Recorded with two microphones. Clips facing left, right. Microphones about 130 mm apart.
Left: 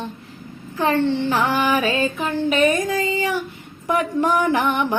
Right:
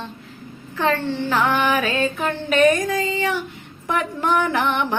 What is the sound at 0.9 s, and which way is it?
Child singing, 25° left (ahead or behind).